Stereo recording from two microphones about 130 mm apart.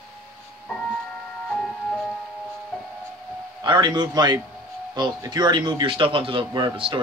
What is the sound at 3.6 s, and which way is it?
Speech, 35° right (ahead or behind).